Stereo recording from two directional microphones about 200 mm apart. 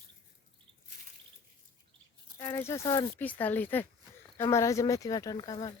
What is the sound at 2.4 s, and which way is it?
Speech, 15° left (ahead or behind).